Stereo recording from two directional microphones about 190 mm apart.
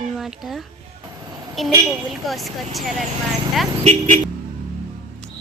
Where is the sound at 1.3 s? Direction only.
20° right (ahead or behind).